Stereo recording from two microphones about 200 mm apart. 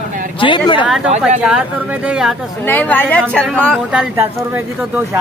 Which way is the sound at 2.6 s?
10° left (ahead or behind).